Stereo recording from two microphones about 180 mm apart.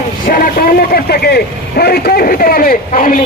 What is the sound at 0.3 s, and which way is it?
A man's voice, 50° left (ahead or behind).